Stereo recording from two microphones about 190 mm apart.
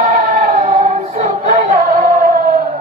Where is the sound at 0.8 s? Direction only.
40° right (ahead or behind).